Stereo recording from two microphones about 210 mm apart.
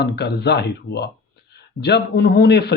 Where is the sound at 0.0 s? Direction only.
50° left (ahead or behind).